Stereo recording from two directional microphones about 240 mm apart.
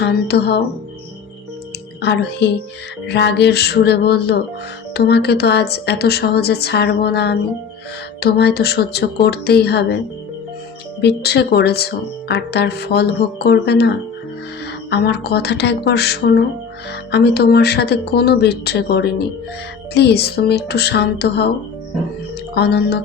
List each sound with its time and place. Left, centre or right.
0.0 s speech: left
2.0 s speech: left
11.0 s speech: left
22.5 s speech: left